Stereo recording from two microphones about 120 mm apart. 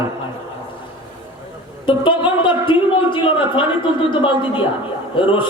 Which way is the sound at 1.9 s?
45° left (ahead or behind).